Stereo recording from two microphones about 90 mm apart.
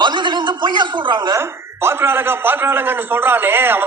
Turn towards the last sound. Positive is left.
turn(degrees=-25)  # may be behind; listen again after turning